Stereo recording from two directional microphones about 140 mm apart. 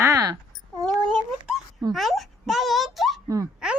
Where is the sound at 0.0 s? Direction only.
25° right (ahead or behind).